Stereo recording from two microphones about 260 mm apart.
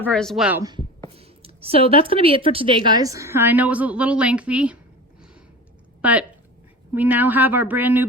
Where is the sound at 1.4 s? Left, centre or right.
Right.